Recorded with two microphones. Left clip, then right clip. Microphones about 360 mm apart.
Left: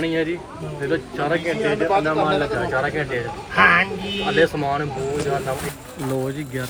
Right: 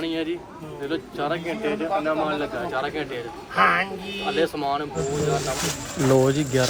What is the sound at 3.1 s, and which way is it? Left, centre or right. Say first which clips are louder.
Speech: left 3 dB; centre.